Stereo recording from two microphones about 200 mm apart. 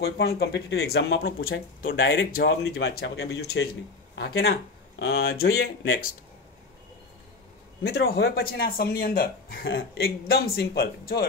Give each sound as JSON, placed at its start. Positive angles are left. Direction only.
{"t": 0.0, "sound": "speech", "side_deg": 50}
{"t": 7.8, "sound": "speech", "side_deg": 55}